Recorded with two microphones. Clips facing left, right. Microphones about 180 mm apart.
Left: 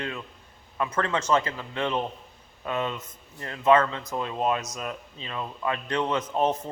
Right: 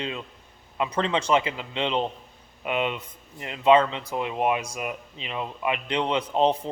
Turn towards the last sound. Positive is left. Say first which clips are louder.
# right 3 dB
turn(degrees=-20)  # may be behind; listen again after turning